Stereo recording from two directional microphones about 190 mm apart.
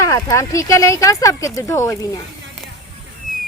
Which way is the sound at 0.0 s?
15° left (ahead or behind).